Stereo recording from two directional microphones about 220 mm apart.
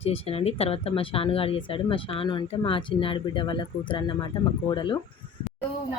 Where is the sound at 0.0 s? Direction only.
25° left (ahead or behind).